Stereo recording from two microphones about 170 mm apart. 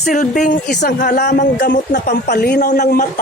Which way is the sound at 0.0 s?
50° left (ahead or behind).